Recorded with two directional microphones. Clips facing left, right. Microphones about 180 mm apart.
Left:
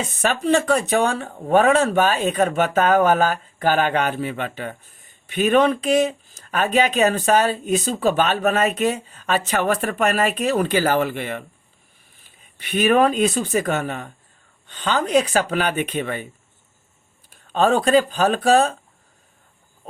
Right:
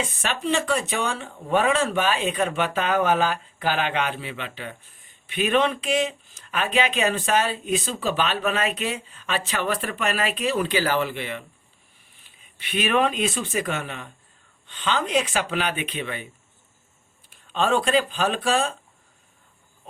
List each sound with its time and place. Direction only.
0.0 s speech: 40° left (ahead or behind)
12.5 s speech: 45° left (ahead or behind)
17.2 s speech: 40° left (ahead or behind)